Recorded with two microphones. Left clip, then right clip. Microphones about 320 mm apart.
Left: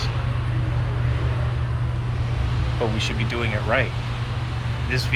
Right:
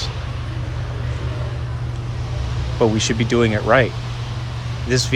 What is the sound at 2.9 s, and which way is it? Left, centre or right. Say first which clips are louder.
Speech: right 6 dB; right.